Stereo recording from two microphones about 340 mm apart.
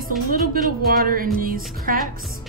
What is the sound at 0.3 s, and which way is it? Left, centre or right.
A woman's voice, right.